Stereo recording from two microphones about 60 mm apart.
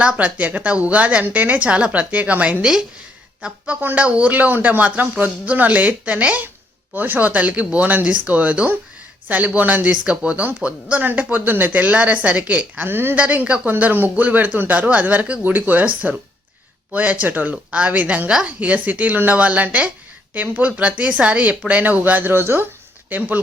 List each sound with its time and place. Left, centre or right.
0.0 s speech: right
3.8 s speech: right
13.1 s speech: right
17.5 s speech: centre